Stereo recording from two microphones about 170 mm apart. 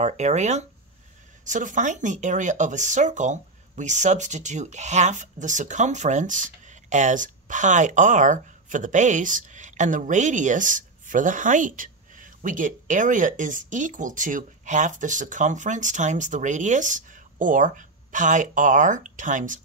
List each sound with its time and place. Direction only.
0.0 s speech: 45° right (ahead or behind)